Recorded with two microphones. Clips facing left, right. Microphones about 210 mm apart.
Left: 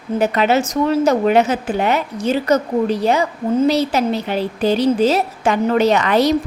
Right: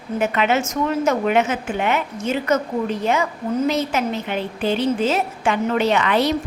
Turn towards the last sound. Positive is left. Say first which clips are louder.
# left 4 dB
turn(degrees=40)  # may be behind; listen again after turning